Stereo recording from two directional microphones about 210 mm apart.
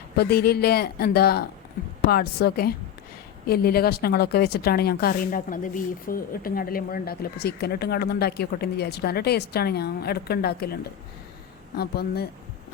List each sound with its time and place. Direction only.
0.2 s a woman's voice: 50° left (ahead or behind)
11.8 s a woman's voice: 50° left (ahead or behind)